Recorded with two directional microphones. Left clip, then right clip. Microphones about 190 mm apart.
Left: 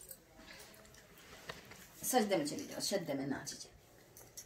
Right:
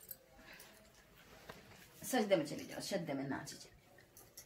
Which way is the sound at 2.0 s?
15° left (ahead or behind).